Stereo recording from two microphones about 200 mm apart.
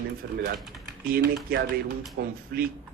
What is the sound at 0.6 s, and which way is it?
Speech, centre (ahead or behind).